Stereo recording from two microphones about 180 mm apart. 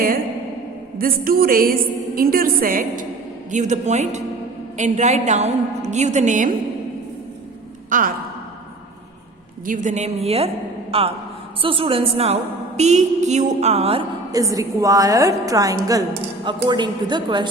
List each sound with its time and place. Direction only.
0.9 s a woman's voice: 55° right (ahead or behind)
7.9 s speech: 45° right (ahead or behind)
9.6 s a woman's voice: 45° right (ahead or behind)
14.3 s a woman's voice: 20° right (ahead or behind)